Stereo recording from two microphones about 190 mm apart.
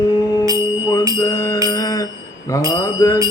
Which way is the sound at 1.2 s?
15° left (ahead or behind).